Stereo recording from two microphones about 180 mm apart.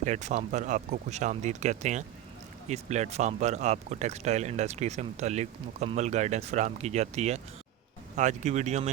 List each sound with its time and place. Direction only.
0.0 s speech: 40° right (ahead or behind)